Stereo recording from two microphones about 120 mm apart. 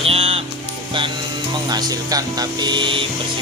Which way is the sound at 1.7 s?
30° right (ahead or behind).